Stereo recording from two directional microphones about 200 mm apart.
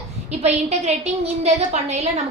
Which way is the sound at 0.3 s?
35° right (ahead or behind).